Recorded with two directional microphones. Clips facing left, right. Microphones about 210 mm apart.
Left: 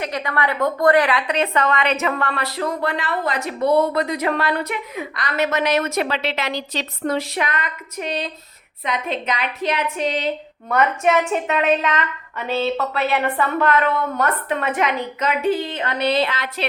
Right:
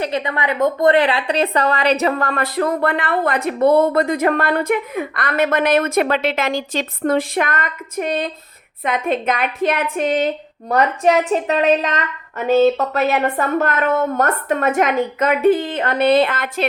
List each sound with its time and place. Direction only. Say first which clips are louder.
0.0 s a woman's voice: right 2 dB; 25° right (ahead or behind); by 10.3 s 50° right (ahead or behind)
10.7 s a woman's voice: right 3 dB; 35° right (ahead or behind); by 16.6 s 50° right (ahead or behind)